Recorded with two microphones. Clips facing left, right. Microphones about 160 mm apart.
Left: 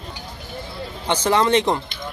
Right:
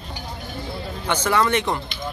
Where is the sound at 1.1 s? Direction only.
30° left (ahead or behind).